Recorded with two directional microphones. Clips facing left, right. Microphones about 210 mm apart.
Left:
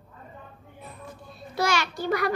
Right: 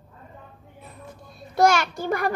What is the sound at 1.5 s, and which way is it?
Speech, 50° right (ahead or behind).